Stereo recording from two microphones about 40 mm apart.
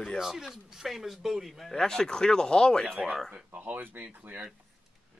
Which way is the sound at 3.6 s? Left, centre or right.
Right.